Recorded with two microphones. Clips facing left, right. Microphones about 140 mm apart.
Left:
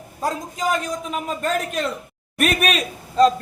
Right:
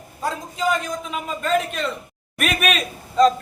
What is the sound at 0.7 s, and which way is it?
A man's voice, 40° left (ahead or behind).